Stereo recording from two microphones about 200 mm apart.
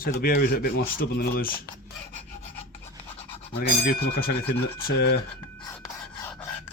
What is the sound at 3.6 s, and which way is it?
Speech, 40° left (ahead or behind).